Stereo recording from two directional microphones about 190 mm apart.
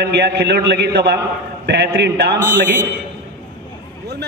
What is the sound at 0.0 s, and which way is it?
A man's voice, 60° right (ahead or behind).